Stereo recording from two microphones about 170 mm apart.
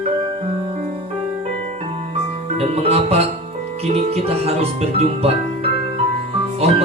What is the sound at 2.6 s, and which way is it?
Speech, 40° right (ahead or behind).